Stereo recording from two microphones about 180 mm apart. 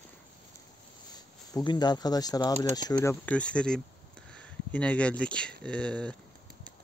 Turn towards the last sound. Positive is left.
turn(degrees=5)  # may be behind; listen again after turning